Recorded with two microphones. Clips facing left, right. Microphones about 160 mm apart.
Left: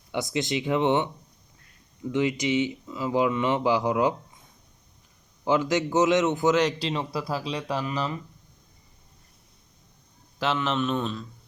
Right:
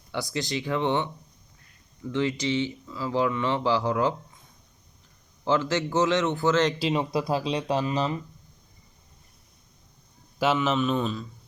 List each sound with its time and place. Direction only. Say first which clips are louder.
0.1 s speech: left 3 dB; 20° left (ahead or behind)
5.5 s speech: left 1 dB; 15° left (ahead or behind)
6.7 s speech: right 4 dB; 5° right (ahead or behind)
7.1 s speech: right 4 dB; 20° right (ahead or behind)
10.3 s a man's voice: right 3 dB; 10° right (ahead or behind)